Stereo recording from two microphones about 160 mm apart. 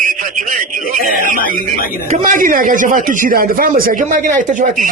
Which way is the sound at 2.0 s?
55° right (ahead or behind).